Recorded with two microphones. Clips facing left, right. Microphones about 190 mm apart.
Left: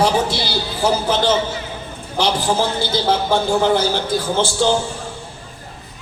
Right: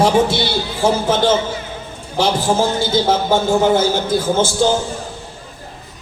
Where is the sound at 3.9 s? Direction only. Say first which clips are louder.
Right 3 dB; 45° right (ahead or behind).